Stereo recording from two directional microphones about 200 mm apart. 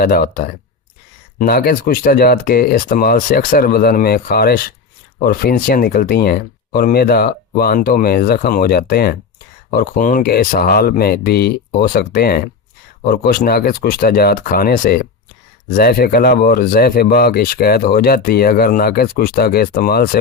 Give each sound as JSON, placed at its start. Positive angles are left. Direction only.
{"t": 0.0, "sound": "speech", "side_deg": 50}